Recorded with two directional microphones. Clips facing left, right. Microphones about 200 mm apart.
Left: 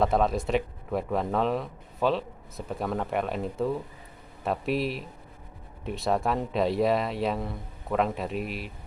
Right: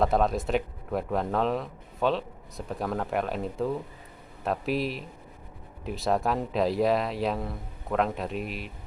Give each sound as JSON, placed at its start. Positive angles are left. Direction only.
{"t": 0.0, "sound": "speech", "side_deg": 0}